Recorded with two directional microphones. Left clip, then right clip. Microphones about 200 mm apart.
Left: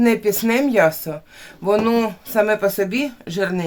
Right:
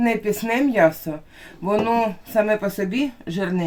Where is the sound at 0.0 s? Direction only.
50° left (ahead or behind).